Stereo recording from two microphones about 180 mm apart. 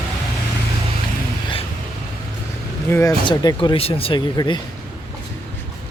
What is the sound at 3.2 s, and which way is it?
Speech, 25° left (ahead or behind).